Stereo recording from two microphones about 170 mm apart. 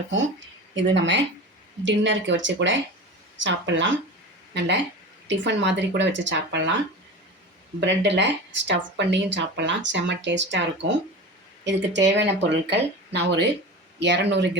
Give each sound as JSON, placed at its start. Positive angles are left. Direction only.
{"t": 0.1, "sound": "speech", "side_deg": -90}
{"t": 7.8, "sound": "speech", "side_deg": -90}